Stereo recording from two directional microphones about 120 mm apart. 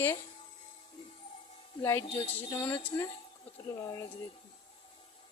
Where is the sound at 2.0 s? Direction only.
50° left (ahead or behind).